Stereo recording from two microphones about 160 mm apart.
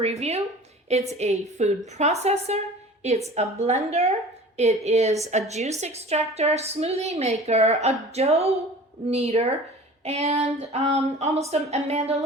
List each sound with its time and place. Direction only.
0.0 s a woman's voice: 40° right (ahead or behind)